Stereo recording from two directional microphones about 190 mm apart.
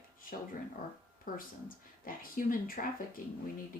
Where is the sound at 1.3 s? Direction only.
50° left (ahead or behind).